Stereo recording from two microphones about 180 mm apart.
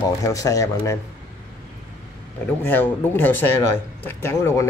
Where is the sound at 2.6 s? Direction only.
10° left (ahead or behind).